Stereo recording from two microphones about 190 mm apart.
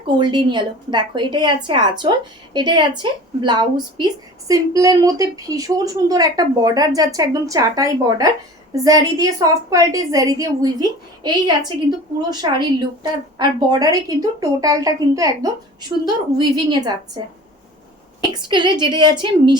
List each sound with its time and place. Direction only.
0.2 s a woman's voice: 25° right (ahead or behind)